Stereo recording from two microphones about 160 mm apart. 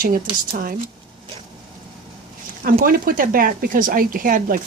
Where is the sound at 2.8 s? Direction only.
60° right (ahead or behind).